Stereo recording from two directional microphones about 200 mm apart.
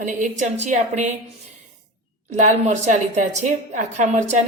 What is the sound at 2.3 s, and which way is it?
A woman's voice, 35° right (ahead or behind).